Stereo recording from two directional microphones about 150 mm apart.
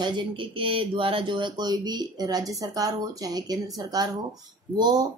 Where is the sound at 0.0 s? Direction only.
30° right (ahead or behind).